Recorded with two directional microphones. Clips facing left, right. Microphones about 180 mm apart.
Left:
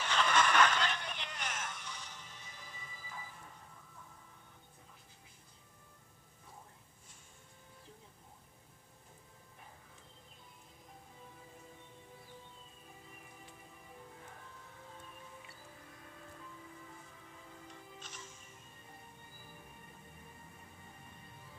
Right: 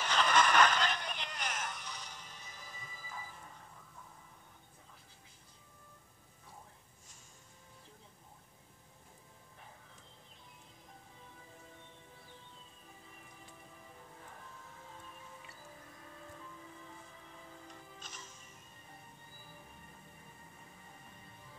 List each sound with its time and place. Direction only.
0.0 s music: 40° right (ahead or behind)